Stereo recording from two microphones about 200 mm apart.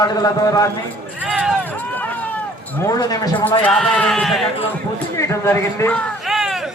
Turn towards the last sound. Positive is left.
turn(degrees=0)  # may be behind; listen again after turning